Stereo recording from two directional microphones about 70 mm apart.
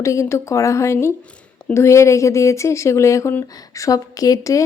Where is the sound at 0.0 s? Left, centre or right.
Left.